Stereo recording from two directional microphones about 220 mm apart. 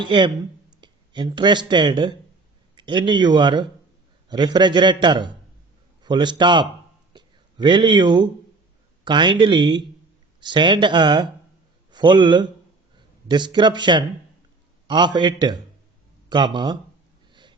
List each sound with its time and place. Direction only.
0.0 s a man's voice: 20° right (ahead or behind)
7.1 s a sound: 20° right (ahead or behind)
9.0 s a man's voice: 20° right (ahead or behind)